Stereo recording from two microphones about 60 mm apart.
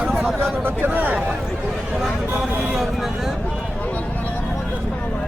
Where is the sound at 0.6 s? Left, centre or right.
Right.